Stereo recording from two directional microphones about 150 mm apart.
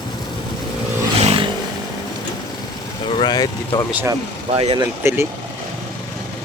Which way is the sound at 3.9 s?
15° right (ahead or behind).